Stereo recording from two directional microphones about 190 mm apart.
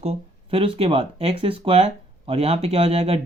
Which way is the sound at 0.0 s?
30° right (ahead or behind).